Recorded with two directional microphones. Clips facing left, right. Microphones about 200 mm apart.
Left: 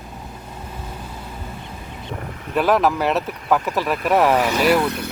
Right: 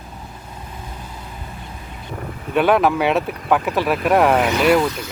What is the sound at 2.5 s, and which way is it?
Speech, centre (ahead or behind).